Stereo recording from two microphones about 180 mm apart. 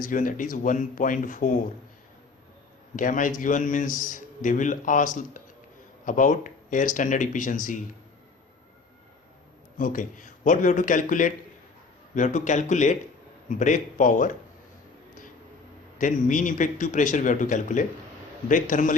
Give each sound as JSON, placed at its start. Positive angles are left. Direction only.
{"t": 0.0, "sound": "a man's voice", "side_deg": 50}
{"t": 2.9, "sound": "a man's voice", "side_deg": 45}
{"t": 9.7, "sound": "a man's voice", "side_deg": 45}
{"t": 16.0, "sound": "a man's voice", "side_deg": 45}